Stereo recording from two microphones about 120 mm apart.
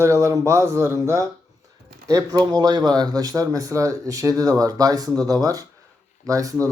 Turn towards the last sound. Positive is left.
turn(degrees=-30)  # may be behind; listen again after turning